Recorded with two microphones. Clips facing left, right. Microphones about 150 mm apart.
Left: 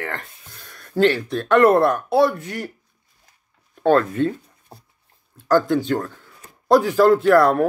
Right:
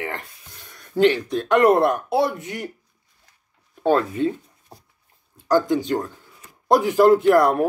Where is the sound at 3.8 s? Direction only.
15° right (ahead or behind).